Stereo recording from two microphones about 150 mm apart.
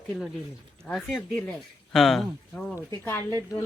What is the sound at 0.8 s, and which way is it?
Speech, centre (ahead or behind).